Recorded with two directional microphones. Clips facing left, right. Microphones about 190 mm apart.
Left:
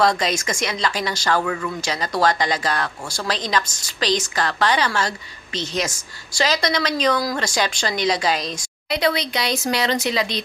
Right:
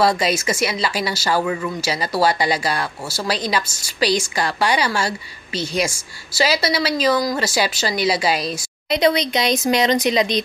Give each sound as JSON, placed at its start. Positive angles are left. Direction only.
{"t": 0.0, "sound": "speech", "side_deg": -10}
{"t": 8.8, "sound": "speech", "side_deg": -20}